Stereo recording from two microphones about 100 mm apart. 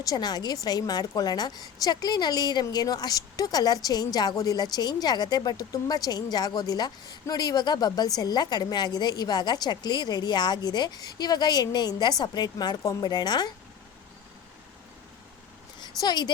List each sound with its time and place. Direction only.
0.0 s a woman's voice: 40° left (ahead or behind)
16.0 s a woman's voice: 45° left (ahead or behind)